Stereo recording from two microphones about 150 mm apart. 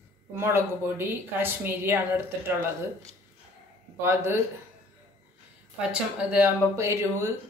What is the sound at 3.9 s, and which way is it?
Speech, 15° right (ahead or behind).